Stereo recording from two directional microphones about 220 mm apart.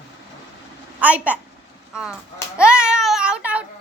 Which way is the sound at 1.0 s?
5° right (ahead or behind).